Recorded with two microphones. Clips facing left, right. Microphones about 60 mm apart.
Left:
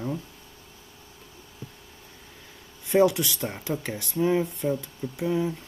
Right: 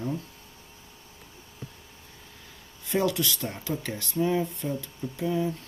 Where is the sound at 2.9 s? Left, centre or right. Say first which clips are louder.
Left 5 dB; left.